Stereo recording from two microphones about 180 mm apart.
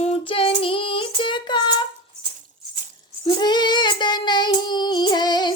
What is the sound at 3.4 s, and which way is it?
Child singing, 25° left (ahead or behind).